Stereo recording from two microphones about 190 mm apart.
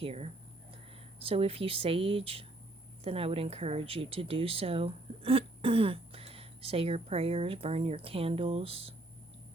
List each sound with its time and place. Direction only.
0.0 s speech: 30° right (ahead or behind)